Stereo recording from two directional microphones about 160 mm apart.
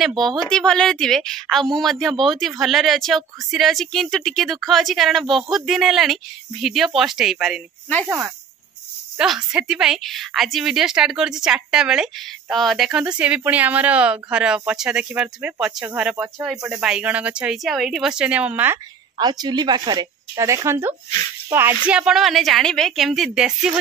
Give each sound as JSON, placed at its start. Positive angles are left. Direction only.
{"t": 0.4, "sound": "a woman's voice", "side_deg": 5}
{"t": 9.2, "sound": "a woman's voice", "side_deg": -5}
{"t": 19.1, "sound": "a woman's voice", "side_deg": -25}